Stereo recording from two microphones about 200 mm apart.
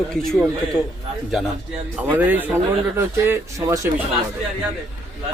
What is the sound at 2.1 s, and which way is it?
Speech, 10° right (ahead or behind).